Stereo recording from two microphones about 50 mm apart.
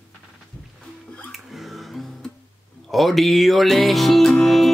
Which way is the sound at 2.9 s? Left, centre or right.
Centre.